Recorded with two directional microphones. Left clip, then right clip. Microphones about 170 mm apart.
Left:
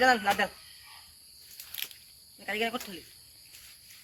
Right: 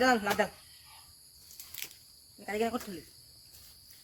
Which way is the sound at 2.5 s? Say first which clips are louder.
Left 1 dB; 60° right (ahead or behind).